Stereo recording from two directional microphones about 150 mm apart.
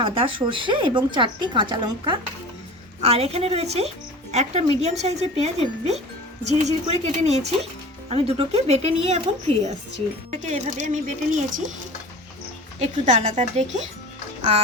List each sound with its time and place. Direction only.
0.0 s a woman's voice: 35° right (ahead or behind)
3.0 s speech: 45° right (ahead or behind)
12.8 s speech: 50° right (ahead or behind)